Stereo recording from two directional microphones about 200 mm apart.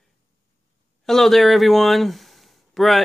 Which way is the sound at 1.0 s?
Centre (ahead or behind).